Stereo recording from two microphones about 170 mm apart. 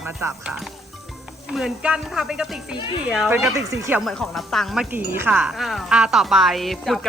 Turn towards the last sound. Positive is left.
turn(degrees=0)  # may be behind; listen again after turning